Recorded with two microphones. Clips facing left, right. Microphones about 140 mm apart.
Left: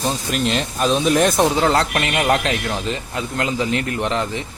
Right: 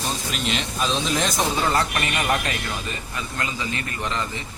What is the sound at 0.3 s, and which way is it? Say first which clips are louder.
Speech: left 6 dB; 50° left (ahead or behind).